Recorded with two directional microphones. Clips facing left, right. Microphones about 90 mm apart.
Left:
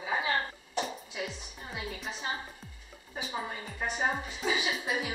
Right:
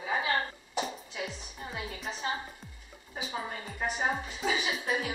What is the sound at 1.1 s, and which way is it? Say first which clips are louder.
Music: even; centre (ahead or behind).